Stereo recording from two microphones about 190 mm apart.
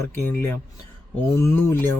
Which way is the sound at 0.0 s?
10° left (ahead or behind).